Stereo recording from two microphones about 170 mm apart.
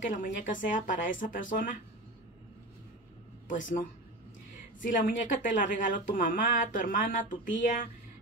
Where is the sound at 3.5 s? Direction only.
50° left (ahead or behind).